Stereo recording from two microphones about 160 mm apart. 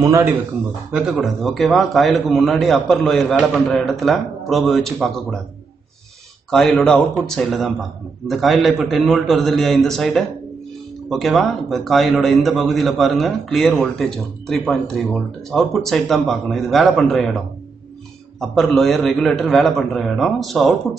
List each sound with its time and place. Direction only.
0.0 s a man's voice: 15° right (ahead or behind)
0.9 s a man's voice: 5° right (ahead or behind)
6.5 s a man's voice: 5° left (ahead or behind)
18.4 s a man's voice: centre (ahead or behind)